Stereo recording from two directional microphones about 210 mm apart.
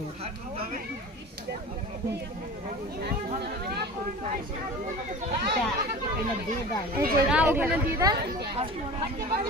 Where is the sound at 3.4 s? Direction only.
50° right (ahead or behind).